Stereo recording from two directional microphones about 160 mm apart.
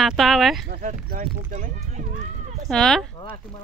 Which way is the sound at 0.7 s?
50° right (ahead or behind).